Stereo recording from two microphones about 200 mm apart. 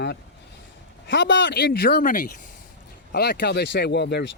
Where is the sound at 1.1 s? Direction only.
65° left (ahead or behind); by 2.3 s 45° left (ahead or behind).